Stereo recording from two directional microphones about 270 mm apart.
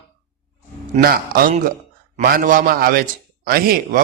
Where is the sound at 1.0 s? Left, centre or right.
Right.